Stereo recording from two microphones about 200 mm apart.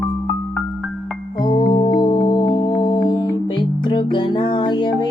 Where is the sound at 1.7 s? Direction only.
20° left (ahead or behind).